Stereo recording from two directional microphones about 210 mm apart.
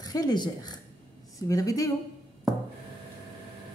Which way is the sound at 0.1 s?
20° left (ahead or behind).